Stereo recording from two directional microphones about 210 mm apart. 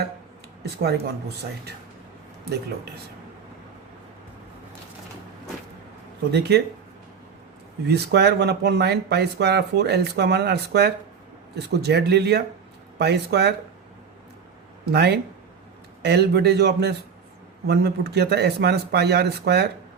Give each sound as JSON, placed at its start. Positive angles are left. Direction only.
{"t": 0.6, "sound": "speech", "side_deg": -50}
{"t": 7.9, "sound": "speech", "side_deg": -50}
{"t": 14.9, "sound": "speech", "side_deg": -50}